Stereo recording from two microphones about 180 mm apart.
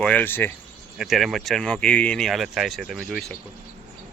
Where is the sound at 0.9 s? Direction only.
Centre (ahead or behind).